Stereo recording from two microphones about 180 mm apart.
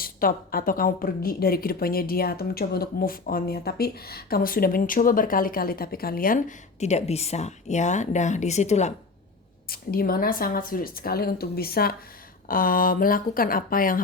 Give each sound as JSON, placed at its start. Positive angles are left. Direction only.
{"t": 0.0, "sound": "a woman's voice", "side_deg": 55}
{"t": 9.6, "sound": "a woman's voice", "side_deg": 55}